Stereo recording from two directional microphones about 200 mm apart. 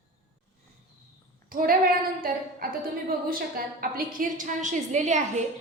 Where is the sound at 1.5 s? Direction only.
45° right (ahead or behind).